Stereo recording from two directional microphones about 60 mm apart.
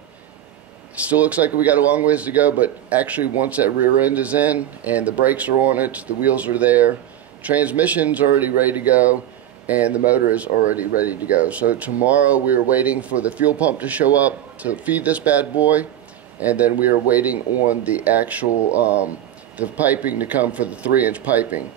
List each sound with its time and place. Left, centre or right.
0.9 s speech: right